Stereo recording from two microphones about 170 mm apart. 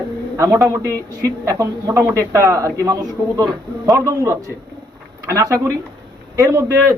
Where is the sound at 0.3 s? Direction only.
20° right (ahead or behind).